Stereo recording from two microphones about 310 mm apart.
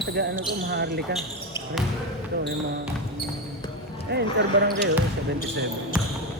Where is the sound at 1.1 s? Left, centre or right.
Centre.